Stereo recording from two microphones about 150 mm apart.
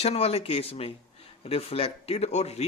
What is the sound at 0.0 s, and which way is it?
Speech, 45° left (ahead or behind).